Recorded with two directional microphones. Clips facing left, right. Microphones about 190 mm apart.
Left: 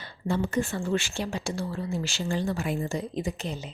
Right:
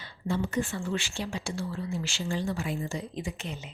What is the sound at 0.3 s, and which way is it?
Speech, 45° left (ahead or behind).